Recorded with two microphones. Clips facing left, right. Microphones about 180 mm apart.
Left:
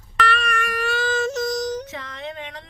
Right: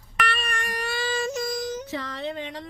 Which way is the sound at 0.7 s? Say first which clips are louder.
Left 4 dB; 15° right (ahead or behind).